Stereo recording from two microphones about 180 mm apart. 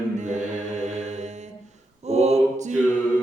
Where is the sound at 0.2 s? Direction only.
40° right (ahead or behind).